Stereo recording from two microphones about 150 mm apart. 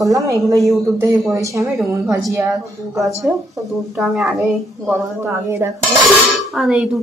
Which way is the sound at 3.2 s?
Centre (ahead or behind).